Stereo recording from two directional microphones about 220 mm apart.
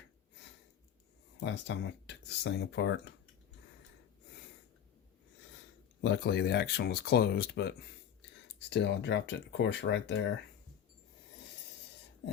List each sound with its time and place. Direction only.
1.5 s speech: 55° left (ahead or behind)
6.0 s speech: 50° left (ahead or behind)
8.7 s speech: 50° left (ahead or behind)